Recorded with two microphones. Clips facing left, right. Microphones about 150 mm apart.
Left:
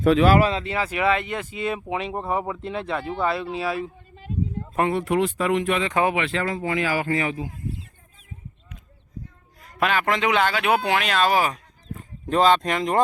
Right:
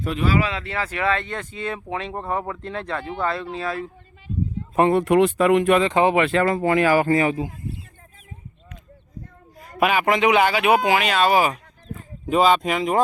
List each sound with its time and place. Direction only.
0.0 s speech: 80° left
0.6 s speech: 15° left (ahead or behind)
5.0 s speech: 65° right (ahead or behind)
5.8 s speech: 25° right (ahead or behind)
6.1 s speech: 50° right (ahead or behind)
9.6 s a man's voice: 10° right (ahead or behind)